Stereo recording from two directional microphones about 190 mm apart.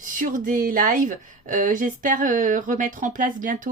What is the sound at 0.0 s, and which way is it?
Speech, 45° right (ahead or behind).